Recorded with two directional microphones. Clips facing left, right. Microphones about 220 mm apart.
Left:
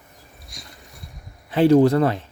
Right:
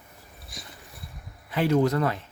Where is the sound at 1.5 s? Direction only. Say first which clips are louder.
Left 8 dB; 30° left (ahead or behind).